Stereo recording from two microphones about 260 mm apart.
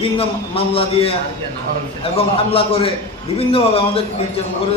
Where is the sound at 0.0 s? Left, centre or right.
Left.